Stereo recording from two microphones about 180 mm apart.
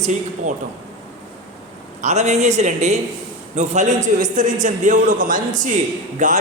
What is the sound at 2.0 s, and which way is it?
A man's voice, 40° right (ahead or behind).